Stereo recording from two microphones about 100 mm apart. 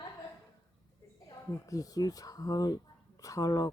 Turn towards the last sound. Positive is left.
turn(degrees=35)  # may be behind; listen again after turning